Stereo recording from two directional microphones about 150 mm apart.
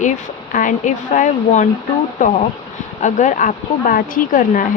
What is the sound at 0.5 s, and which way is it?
Speech, 60° left (ahead or behind).